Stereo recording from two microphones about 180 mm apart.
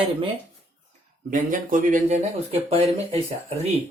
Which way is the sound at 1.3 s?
45° right (ahead or behind).